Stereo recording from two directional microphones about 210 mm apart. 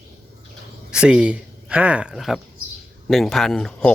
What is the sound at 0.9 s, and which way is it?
Speech, 5° right (ahead or behind).